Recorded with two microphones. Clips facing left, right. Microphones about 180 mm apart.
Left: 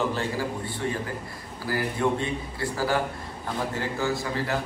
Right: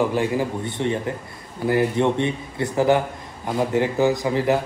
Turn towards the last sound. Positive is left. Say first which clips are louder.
# right 8 dB
turn(degrees=-15)  # may be behind; listen again after turning